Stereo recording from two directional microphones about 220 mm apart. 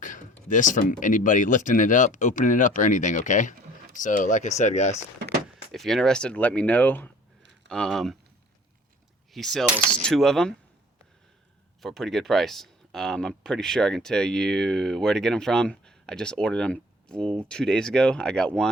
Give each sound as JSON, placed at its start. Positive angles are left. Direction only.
{"t": 0.0, "sound": "a sound", "side_deg": 35}
{"t": 0.4, "sound": "speech", "side_deg": 35}
{"t": 5.7, "sound": "speech", "side_deg": 0}
{"t": 9.3, "sound": "speech", "side_deg": 0}
{"t": 11.8, "sound": "speech", "side_deg": 0}